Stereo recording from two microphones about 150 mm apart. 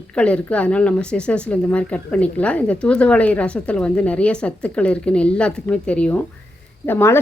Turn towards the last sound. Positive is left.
turn(degrees=15)  # may be behind; listen again after turning